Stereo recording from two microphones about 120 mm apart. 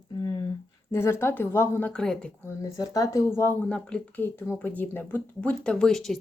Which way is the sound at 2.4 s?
25° left (ahead or behind).